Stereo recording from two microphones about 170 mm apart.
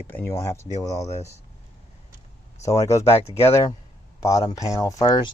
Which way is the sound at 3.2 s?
40° left (ahead or behind).